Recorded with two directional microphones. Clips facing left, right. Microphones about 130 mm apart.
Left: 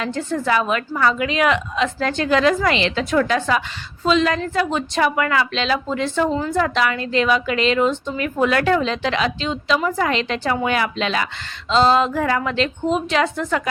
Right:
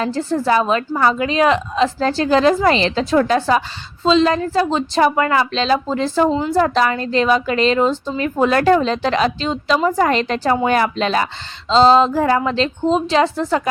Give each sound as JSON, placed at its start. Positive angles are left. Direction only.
{"t": 0.0, "sound": "a woman's voice", "side_deg": -35}